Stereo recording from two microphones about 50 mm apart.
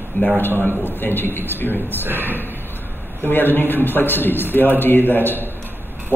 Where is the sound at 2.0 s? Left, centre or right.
Right.